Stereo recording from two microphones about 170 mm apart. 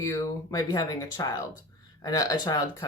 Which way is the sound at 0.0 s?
20° left (ahead or behind).